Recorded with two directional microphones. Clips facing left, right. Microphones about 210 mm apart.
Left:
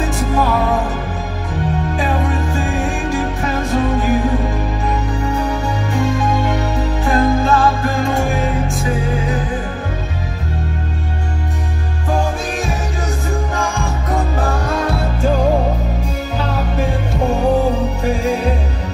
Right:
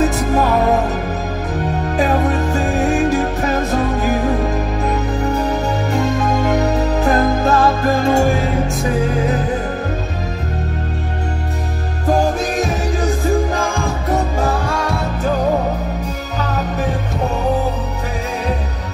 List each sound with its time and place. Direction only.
0.0 s music: 40° right (ahead or behind)
2.0 s music: 40° right (ahead or behind)